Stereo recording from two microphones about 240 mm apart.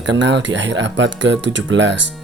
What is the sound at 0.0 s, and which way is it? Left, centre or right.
Speech, right.